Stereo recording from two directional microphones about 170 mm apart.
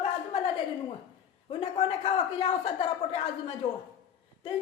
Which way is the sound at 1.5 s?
30° left (ahead or behind).